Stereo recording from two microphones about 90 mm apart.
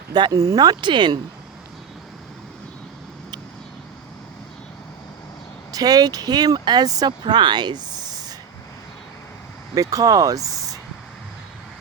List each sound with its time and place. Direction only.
0.1 s speech: 50° right (ahead or behind)
5.7 s speech: 45° right (ahead or behind)
9.7 s speech: 40° right (ahead or behind)